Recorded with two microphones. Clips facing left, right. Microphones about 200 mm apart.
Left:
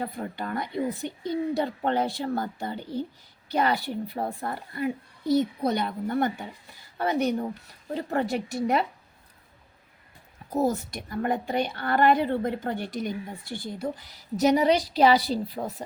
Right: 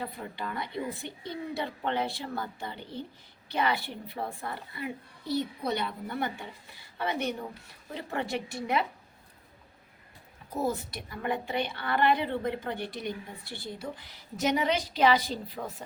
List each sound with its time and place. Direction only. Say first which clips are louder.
0.0 s a woman's voice: left 5 dB; 45° left (ahead or behind)
10.5 s a woman's voice: left 5 dB; 45° left (ahead or behind)